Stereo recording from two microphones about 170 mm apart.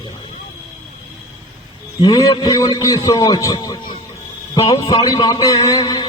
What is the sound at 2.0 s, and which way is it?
A man's voice, 25° left (ahead or behind).